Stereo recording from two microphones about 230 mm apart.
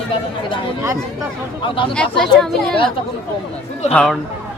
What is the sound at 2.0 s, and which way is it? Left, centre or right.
Speech, centre.